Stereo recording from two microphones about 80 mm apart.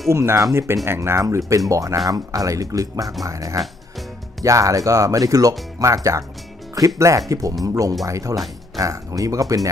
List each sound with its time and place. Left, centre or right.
0.1 s speech: right
7.0 s speech: right